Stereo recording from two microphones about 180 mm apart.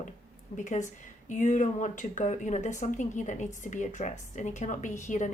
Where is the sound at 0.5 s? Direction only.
40° left (ahead or behind).